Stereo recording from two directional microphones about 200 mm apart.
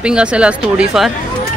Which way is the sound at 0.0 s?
5° right (ahead or behind).